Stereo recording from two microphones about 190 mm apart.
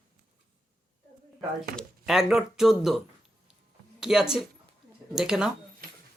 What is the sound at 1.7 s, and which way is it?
Speech, centre (ahead or behind).